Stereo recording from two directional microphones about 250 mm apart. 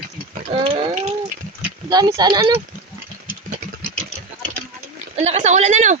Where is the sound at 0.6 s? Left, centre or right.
Centre.